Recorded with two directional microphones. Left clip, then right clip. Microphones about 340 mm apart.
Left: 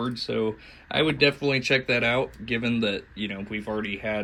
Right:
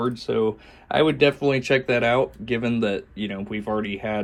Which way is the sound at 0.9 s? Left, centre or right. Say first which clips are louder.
Right 3 dB; centre.